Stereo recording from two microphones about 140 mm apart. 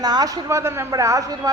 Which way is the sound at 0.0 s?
30° right (ahead or behind).